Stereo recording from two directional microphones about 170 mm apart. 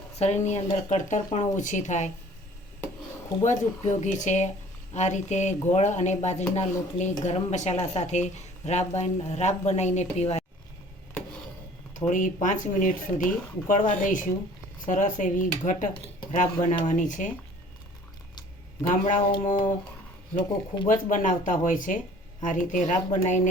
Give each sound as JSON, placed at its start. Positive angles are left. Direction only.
{"t": 0.2, "sound": "speech", "side_deg": 40}
{"t": 3.4, "sound": "speech", "side_deg": 45}
{"t": 11.9, "sound": "speech", "side_deg": 50}
{"t": 18.8, "sound": "speech", "side_deg": 50}
{"t": 20.8, "sound": "speech", "side_deg": 50}